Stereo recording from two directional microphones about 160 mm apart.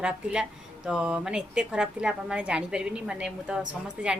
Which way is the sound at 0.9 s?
5° right (ahead or behind).